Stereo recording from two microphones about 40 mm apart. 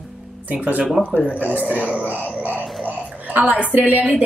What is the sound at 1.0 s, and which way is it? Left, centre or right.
Speech, left.